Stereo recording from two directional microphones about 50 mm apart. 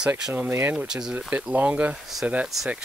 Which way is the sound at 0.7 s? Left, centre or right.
Centre.